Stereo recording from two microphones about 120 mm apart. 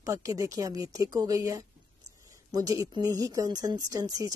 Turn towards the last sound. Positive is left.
turn(degrees=-30)  # may be behind; listen again after turning